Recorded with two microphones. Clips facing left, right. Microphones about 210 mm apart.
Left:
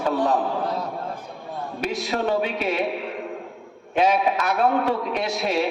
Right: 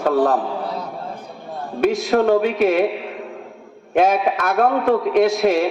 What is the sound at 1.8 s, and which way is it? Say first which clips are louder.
A man's voice: right 9 dB; 50° right (ahead or behind).